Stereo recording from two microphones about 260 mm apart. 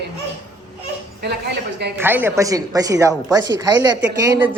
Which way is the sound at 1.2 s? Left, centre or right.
Right.